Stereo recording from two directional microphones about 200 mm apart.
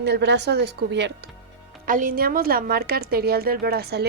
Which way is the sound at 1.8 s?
40° right (ahead or behind).